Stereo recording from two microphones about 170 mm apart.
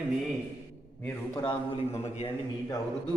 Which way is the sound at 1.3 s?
30° left (ahead or behind).